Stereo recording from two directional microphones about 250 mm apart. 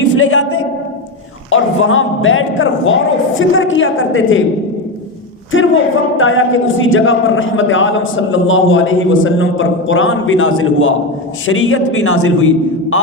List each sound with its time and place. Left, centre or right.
0.2 s speech: left
1.5 s speech: left
5.5 s speech: left